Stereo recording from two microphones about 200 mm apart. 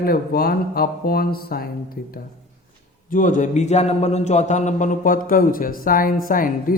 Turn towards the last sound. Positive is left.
turn(degrees=45)  # may be behind; listen again after turning